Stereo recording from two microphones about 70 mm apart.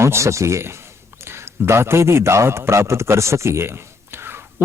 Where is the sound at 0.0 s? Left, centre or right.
Right.